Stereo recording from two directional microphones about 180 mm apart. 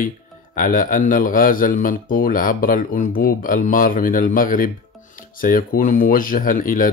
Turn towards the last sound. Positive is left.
turn(degrees=50)  # may be behind; listen again after turning